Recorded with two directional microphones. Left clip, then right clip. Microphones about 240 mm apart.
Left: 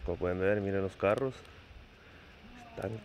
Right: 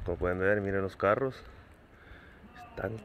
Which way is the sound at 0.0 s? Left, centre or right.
Centre.